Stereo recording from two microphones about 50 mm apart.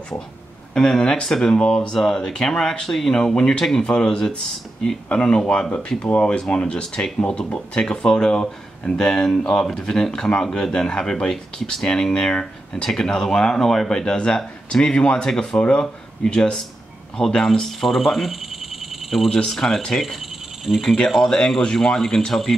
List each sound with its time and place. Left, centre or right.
0.7 s speech: centre
6.0 s speech: left
6.5 s speech: centre
7.8 s speech: centre
21.3 s speech: centre